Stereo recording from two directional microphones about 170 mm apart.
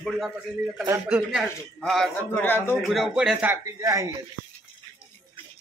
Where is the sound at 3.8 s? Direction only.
20° right (ahead or behind).